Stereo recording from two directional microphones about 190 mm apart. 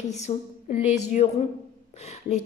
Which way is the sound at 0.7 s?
40° left (ahead or behind).